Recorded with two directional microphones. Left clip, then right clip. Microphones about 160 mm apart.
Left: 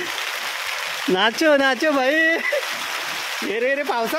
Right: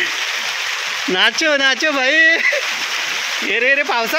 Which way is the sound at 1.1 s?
30° left (ahead or behind).